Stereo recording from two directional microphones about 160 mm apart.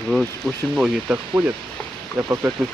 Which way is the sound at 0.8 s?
5° right (ahead or behind).